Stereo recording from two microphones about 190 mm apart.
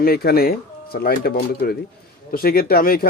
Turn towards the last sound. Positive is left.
turn(degrees=50)  # may be behind; listen again after turning